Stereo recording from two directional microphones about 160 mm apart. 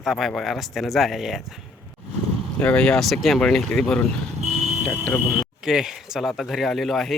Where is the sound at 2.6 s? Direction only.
5° left (ahead or behind).